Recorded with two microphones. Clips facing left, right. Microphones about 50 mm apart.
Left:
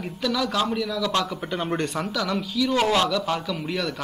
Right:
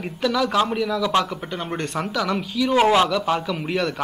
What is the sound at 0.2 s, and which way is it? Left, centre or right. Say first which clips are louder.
A man's voice: right 4 dB; centre.